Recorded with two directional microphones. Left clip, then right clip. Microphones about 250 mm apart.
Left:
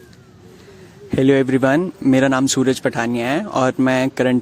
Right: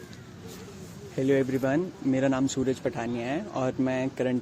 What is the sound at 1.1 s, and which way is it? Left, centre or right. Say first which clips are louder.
Speech: left 10 dB; left.